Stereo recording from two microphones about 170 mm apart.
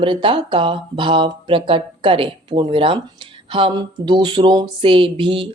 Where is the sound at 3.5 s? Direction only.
30° right (ahead or behind).